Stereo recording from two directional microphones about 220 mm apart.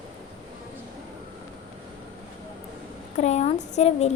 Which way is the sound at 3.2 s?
30° left (ahead or behind).